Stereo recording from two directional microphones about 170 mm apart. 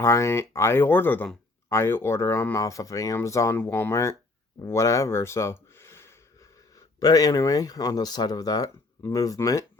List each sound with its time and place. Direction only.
0.0 s speech: 15° left (ahead or behind)